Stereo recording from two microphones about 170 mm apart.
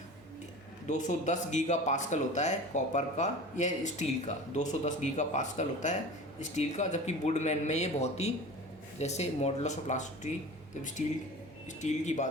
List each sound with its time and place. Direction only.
0.9 s speech: 45° left (ahead or behind)
11.8 s speech: 45° left (ahead or behind)